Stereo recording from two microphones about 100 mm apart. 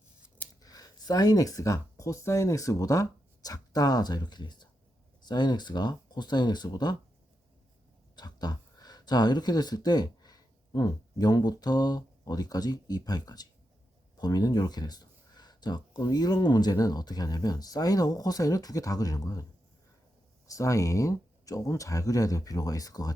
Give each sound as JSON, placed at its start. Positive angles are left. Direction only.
{"t": 0.6, "sound": "speech", "side_deg": 40}
{"t": 8.1, "sound": "speech", "side_deg": 45}
{"t": 20.5, "sound": "speech", "side_deg": 35}